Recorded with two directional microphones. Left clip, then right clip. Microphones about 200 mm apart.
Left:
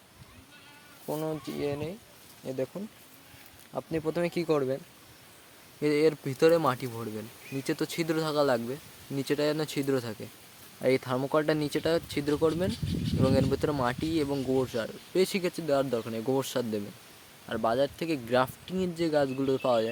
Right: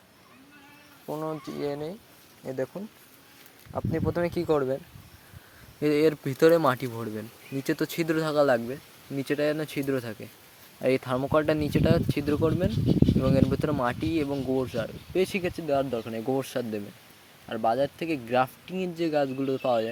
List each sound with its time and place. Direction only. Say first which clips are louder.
1.0 s speech: even; 5° left (ahead or behind)
1.6 s speech: right 2 dB; 10° right (ahead or behind)
5.8 s speech: right 2 dB; 15° right (ahead or behind); by 19.9 s centre (ahead or behind)